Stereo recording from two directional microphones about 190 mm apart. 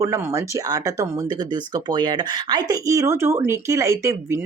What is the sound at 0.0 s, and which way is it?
Speech, 15° right (ahead or behind).